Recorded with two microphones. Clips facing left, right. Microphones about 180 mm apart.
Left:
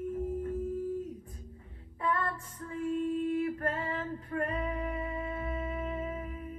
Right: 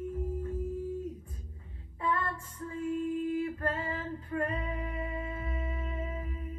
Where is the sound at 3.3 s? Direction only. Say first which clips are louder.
Left 1 dB; 25° right (ahead or behind).